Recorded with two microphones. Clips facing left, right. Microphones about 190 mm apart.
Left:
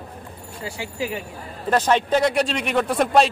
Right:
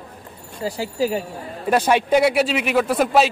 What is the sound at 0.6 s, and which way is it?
Speech, 35° right (ahead or behind).